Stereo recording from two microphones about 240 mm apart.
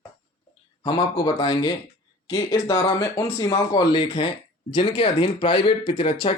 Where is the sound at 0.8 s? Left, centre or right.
Centre.